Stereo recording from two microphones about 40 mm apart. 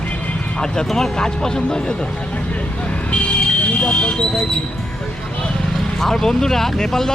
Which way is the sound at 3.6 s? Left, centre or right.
Left.